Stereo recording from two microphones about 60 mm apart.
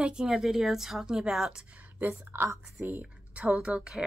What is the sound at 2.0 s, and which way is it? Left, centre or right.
A woman's voice, right.